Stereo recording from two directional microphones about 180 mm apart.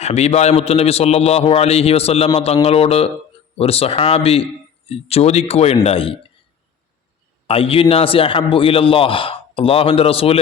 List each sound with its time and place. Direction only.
0.0 s a man's voice: 35° left (ahead or behind)
7.4 s a man's voice: 30° left (ahead or behind)